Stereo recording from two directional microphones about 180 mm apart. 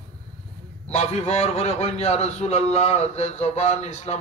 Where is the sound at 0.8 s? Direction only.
35° left (ahead or behind).